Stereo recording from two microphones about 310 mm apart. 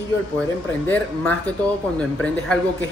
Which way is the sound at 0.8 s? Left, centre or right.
Centre.